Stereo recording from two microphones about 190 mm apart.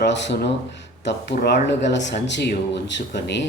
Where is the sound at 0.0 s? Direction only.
65° left (ahead or behind).